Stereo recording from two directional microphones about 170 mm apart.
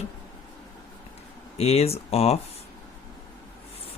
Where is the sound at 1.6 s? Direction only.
40° left (ahead or behind).